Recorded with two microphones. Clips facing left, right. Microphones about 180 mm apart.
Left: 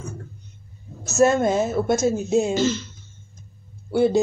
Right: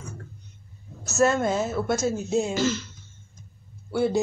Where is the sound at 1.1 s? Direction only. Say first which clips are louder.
Left 4 dB; 20° left (ahead or behind).